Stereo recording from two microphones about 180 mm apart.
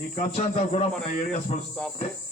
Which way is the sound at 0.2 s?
35° left (ahead or behind).